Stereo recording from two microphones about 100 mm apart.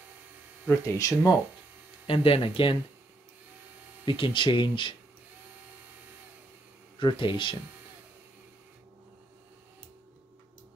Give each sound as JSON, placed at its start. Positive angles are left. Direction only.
{"t": 0.7, "sound": "speech", "side_deg": 30}
{"t": 2.0, "sound": "speech", "side_deg": 65}
{"t": 4.0, "sound": "speech", "side_deg": 55}
{"t": 7.0, "sound": "speech", "side_deg": 55}